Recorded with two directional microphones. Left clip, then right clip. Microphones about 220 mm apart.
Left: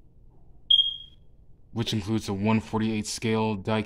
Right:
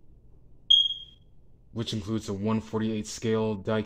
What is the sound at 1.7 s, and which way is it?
Speech, 30° left (ahead or behind).